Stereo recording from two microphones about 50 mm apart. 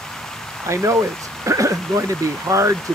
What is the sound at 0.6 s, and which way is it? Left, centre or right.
Speech, right.